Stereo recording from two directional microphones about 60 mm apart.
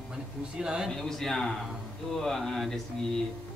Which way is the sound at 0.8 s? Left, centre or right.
Centre.